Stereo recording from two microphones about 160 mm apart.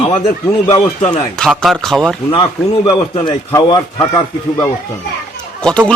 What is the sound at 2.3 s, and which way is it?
A man's voice, 35° left (ahead or behind).